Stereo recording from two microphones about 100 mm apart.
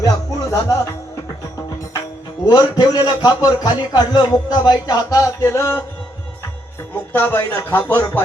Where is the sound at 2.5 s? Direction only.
40° left (ahead or behind).